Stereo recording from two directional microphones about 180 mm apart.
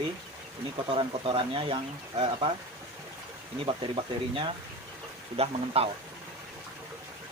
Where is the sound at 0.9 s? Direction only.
30° right (ahead or behind).